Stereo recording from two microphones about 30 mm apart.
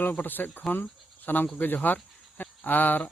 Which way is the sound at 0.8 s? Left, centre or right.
Left.